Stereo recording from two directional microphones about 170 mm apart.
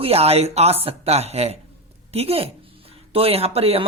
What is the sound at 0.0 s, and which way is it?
Speech, 35° right (ahead or behind).